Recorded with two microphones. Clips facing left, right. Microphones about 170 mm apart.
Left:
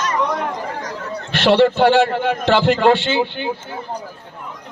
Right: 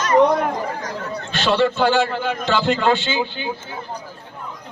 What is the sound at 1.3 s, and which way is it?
A man's voice, 65° left (ahead or behind).